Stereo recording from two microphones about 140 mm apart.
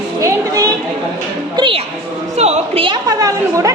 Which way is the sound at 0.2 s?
25° right (ahead or behind).